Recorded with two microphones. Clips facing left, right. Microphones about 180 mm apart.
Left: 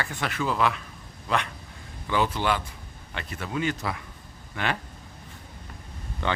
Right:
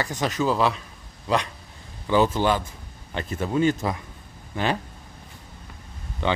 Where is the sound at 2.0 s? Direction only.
40° right (ahead or behind).